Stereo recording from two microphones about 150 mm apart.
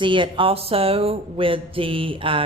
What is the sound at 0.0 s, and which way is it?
Speech, 35° right (ahead or behind).